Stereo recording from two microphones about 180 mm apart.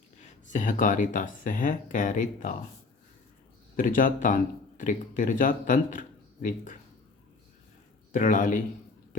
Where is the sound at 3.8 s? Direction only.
50° left (ahead or behind).